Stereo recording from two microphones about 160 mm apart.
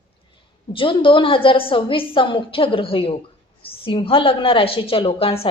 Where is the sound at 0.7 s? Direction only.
30° left (ahead or behind).